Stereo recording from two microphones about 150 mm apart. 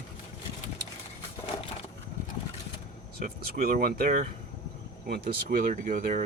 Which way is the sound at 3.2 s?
75° right (ahead or behind).